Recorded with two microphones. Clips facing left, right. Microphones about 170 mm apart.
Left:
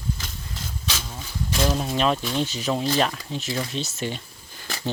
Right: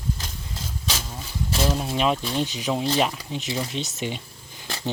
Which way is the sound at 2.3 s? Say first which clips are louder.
Even; 15° right (ahead or behind).